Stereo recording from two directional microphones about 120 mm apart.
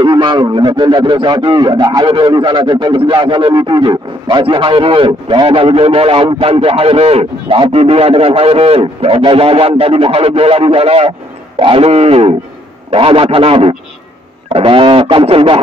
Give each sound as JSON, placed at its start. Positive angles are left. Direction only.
{"t": 0.0, "sound": "a man's voice", "side_deg": -40}